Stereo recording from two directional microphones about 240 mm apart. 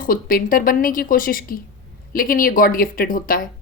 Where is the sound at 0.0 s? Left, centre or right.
Left.